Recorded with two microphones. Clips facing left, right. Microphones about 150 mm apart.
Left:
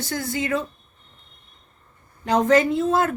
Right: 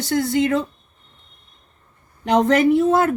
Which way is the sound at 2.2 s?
75° right (ahead or behind).